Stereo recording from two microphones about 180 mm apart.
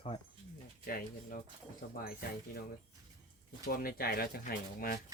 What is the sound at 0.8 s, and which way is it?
Speech, 50° left (ahead or behind).